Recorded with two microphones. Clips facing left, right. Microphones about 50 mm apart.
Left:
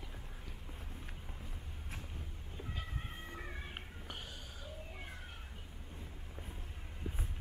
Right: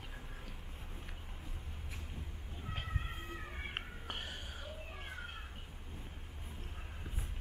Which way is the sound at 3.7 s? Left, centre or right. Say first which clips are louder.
Right 4 dB; right.